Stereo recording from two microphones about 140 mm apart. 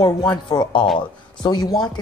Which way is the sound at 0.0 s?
35° left (ahead or behind).